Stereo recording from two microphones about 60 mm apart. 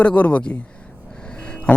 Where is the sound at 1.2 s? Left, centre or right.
Centre.